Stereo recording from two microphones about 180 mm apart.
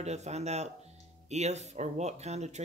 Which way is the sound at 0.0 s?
40° right (ahead or behind).